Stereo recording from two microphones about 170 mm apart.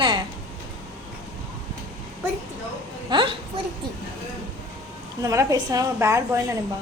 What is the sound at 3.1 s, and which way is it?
Speech, 30° right (ahead or behind).